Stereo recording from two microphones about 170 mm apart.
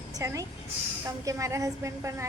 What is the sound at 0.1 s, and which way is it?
A woman's voice, 20° right (ahead or behind).